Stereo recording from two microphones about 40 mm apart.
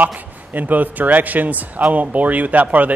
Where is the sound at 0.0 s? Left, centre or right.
Right.